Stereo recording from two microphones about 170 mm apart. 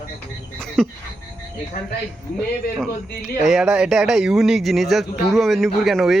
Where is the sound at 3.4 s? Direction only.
5° right (ahead or behind).